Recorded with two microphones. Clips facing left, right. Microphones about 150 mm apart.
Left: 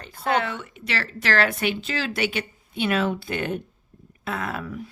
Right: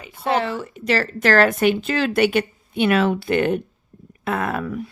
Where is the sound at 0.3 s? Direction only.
30° right (ahead or behind).